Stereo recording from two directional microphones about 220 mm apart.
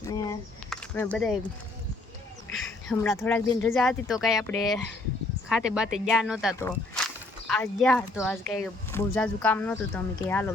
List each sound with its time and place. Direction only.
0.1 s a sound: 15° left (ahead or behind)
0.7 s speech: 5° left (ahead or behind)
2.5 s speech: 5° left (ahead or behind)
6.6 s speech: 10° left (ahead or behind)